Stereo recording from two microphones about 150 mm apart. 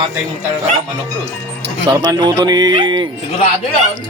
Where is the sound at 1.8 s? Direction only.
25° right (ahead or behind).